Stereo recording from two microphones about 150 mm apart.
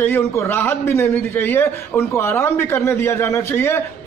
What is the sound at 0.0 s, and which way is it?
A man's voice, 20° left (ahead or behind).